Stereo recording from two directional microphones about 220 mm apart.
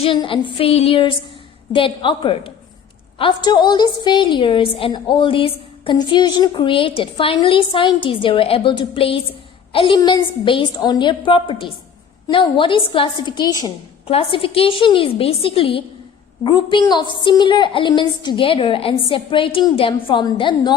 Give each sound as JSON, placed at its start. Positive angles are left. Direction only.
{"t": 0.0, "sound": "a woman's voice", "side_deg": 25}